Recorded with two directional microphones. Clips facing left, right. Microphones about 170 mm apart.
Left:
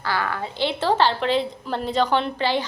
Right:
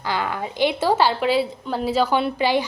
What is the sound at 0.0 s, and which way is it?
A woman's voice, 15° right (ahead or behind).